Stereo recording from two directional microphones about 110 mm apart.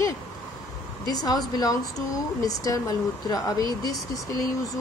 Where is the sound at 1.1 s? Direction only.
35° left (ahead or behind).